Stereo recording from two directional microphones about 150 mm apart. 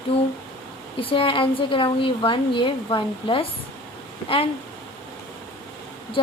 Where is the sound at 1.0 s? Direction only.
35° left (ahead or behind).